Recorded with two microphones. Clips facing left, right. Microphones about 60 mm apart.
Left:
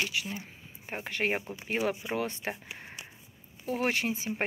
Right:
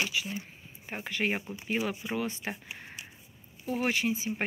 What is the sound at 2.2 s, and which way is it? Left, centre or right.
Speech, left.